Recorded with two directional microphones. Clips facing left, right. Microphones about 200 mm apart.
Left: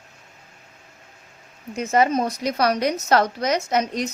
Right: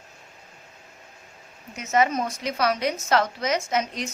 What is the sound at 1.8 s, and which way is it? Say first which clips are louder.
A woman's voice: left 3 dB; 35° left (ahead or behind).